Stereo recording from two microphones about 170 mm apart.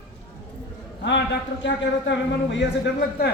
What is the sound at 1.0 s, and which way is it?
A man's voice, 90° left.